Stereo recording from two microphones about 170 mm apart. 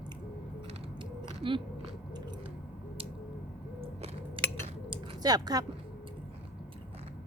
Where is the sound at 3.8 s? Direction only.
40° right (ahead or behind); by 5.7 s 20° right (ahead or behind).